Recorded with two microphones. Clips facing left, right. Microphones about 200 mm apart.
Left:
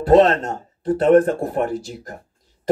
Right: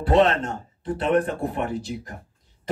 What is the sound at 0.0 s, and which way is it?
Speech, 40° left (ahead or behind).